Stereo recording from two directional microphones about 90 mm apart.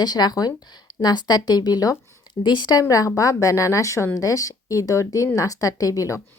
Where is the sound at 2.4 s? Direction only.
60° left (ahead or behind).